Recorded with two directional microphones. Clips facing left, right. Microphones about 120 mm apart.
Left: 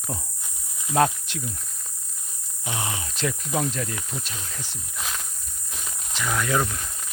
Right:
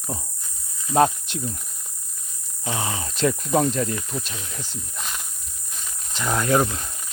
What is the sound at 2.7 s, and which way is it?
Speech, 30° right (ahead or behind).